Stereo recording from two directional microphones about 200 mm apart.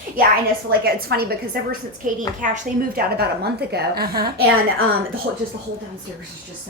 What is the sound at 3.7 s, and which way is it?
Speech, 50° right (ahead or behind).